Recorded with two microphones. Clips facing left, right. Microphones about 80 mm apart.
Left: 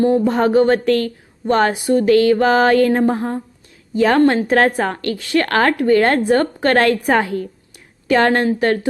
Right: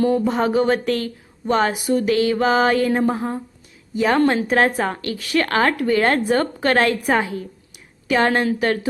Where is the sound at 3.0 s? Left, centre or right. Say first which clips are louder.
Left 3 dB; left.